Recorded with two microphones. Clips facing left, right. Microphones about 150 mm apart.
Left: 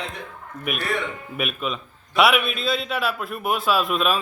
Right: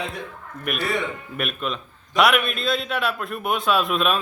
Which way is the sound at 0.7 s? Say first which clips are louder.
Right 1 dB; centre (ahead or behind).